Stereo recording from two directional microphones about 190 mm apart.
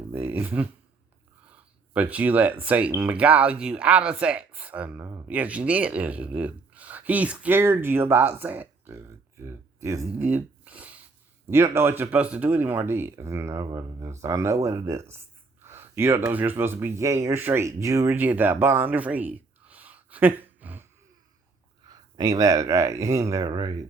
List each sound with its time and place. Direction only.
0.1 s speech: 10° right (ahead or behind)
21.8 s speech: 20° right (ahead or behind)